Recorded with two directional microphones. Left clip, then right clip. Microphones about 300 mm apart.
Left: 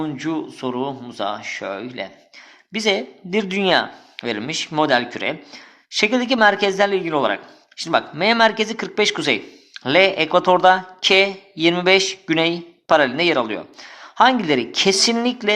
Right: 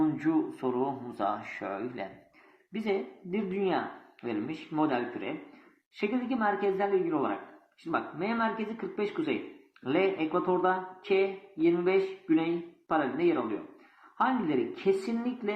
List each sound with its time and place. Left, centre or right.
0.0 s speech: left